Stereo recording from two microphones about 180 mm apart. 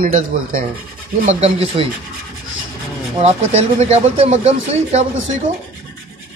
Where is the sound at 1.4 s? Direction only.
35° right (ahead or behind).